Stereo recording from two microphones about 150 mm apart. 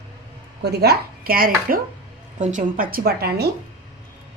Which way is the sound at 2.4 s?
60° right (ahead or behind).